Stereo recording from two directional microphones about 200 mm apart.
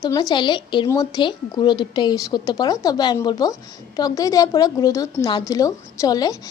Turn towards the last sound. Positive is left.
turn(degrees=20)  # may be behind; listen again after turning